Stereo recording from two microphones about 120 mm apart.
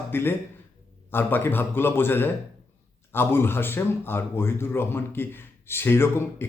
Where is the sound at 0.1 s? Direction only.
20° left (ahead or behind).